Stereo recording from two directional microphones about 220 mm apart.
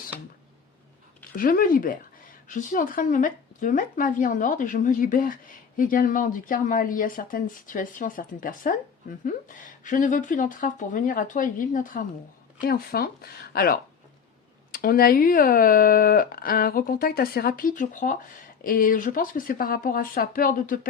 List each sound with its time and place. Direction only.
1.4 s a woman's voice: 40° left (ahead or behind)